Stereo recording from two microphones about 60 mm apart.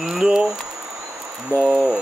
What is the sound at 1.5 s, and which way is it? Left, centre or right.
Speech, right.